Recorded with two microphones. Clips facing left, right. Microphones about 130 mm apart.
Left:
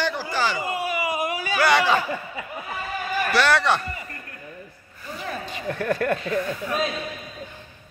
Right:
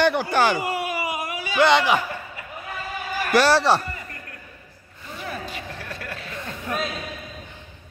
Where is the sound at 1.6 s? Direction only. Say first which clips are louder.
Right 2 dB; 20° right (ahead or behind).